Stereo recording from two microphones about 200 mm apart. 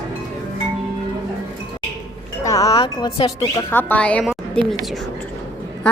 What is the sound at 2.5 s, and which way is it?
Speech, 15° left (ahead or behind).